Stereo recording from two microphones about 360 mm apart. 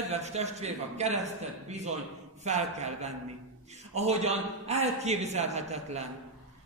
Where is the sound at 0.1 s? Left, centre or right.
Centre.